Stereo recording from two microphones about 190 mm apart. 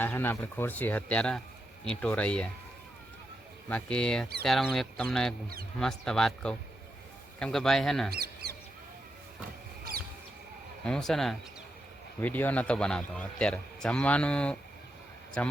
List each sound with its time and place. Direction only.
0.0 s a man's voice: 10° left (ahead or behind)
3.7 s a man's voice: 5° left (ahead or behind)
8.1 s a sound: 55° right (ahead or behind)
10.8 s a man's voice: 5° left (ahead or behind)